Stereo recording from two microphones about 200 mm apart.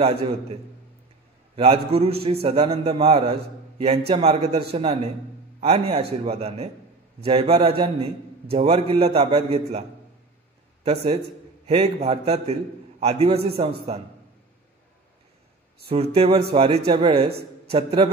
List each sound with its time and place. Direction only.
0.0 s a man's voice: 30° right (ahead or behind)
1.6 s a man's voice: 30° right (ahead or behind)
15.9 s a man's voice: 30° right (ahead or behind)